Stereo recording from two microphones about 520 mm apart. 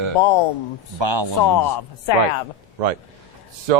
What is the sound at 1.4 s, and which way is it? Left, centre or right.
Speech, left.